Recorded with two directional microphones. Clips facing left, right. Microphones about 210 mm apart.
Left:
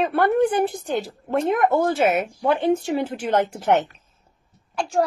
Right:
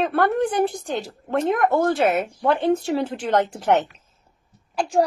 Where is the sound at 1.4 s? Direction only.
Centre (ahead or behind).